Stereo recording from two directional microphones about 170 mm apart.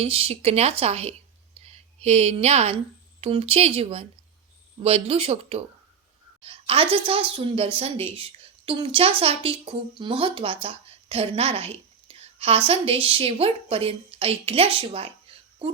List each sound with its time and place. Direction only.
0.0 s a woman's voice: 35° right (ahead or behind)
1.5 s a sound: 40° right (ahead or behind)
3.2 s a woman's voice: 35° right (ahead or behind)